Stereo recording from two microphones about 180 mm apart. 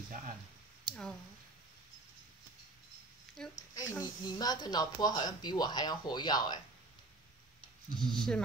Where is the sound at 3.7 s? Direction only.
20° left (ahead or behind).